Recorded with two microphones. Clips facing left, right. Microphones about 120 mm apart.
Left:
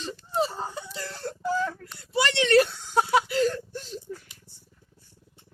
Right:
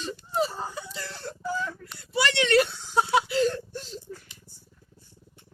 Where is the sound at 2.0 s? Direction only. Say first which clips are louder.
Even; 35° left (ahead or behind).